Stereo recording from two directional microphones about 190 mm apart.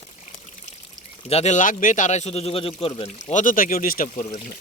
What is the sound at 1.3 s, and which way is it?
Speech, 35° left (ahead or behind).